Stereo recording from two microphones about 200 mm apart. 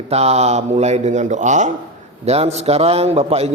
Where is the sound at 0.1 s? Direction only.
30° right (ahead or behind).